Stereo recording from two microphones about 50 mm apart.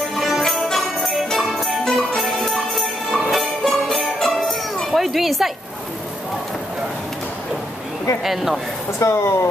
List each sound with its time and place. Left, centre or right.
0.1 s music: centre
4.9 s speech: centre
8.2 s speech: centre
9.0 s speech: left